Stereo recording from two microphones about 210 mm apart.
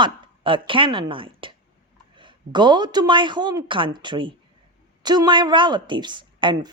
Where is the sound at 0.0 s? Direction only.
25° right (ahead or behind).